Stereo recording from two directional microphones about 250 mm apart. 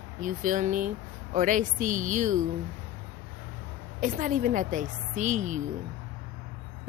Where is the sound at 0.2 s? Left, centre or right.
Right.